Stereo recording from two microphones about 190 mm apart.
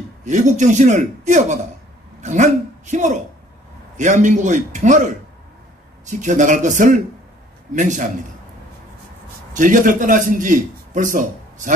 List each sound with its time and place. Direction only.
0.2 s a man's voice: 40° right (ahead or behind)
9.6 s a man's voice: 45° right (ahead or behind)